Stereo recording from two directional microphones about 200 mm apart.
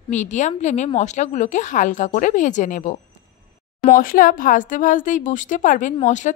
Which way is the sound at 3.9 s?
45° left (ahead or behind).